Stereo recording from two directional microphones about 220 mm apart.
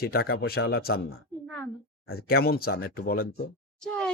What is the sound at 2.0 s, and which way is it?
Speech, 45° left (ahead or behind).